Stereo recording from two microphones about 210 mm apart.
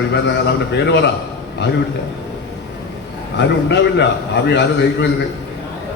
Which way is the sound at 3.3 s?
55° left (ahead or behind).